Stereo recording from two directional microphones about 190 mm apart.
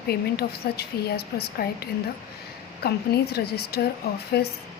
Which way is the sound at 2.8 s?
55° left (ahead or behind).